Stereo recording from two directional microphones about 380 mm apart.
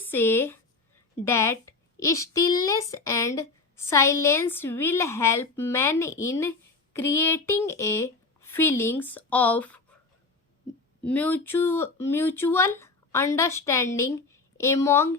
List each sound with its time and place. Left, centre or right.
0.1 s a woman's voice: centre
11.0 s a woman's voice: centre